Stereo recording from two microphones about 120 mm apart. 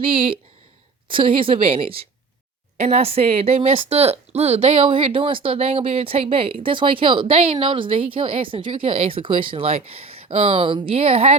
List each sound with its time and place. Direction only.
0.0 s speech: 50° right (ahead or behind)
2.7 s speech: 65° right (ahead or behind)